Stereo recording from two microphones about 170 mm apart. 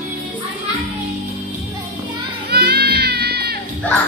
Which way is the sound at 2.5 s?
70° right (ahead or behind).